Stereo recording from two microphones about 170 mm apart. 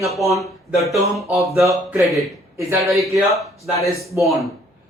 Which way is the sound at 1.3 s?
20° right (ahead or behind).